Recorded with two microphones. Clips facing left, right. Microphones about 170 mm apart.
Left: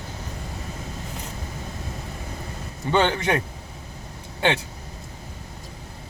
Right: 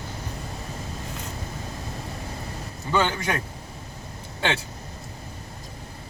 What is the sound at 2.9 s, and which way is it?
Speech, 25° left (ahead or behind).